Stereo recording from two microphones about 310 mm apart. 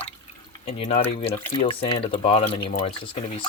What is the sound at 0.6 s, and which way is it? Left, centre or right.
Speech, centre.